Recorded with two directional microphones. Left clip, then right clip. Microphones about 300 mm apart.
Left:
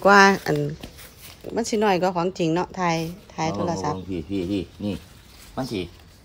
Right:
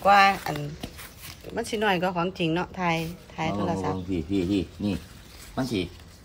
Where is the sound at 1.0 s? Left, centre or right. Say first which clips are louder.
Left 1 dB; centre.